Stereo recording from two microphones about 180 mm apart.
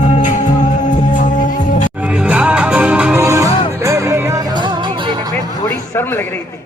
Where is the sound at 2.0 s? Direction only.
5° right (ahead or behind); by 5.3 s 25° right (ahead or behind).